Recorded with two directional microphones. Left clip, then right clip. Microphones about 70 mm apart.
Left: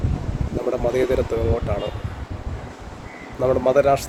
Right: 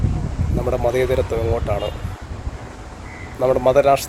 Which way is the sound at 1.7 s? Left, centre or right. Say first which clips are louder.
Right 3 dB; centre.